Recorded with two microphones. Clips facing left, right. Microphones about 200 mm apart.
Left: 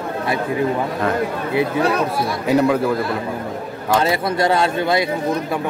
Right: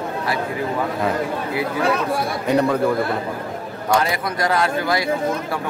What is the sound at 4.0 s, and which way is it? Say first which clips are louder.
Speech: left 4 dB; 25° left (ahead or behind).